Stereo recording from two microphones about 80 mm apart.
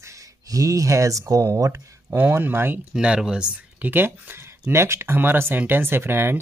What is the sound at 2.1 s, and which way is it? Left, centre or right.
Speech, right.